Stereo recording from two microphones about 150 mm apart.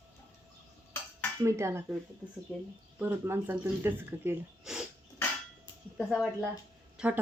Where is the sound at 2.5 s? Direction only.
Centre (ahead or behind).